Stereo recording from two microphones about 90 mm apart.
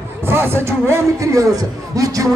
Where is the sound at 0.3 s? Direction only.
25° right (ahead or behind).